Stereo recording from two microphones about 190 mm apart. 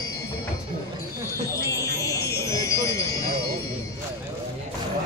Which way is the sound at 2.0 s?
15° left (ahead or behind).